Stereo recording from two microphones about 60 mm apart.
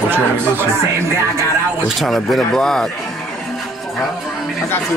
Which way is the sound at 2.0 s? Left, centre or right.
Centre.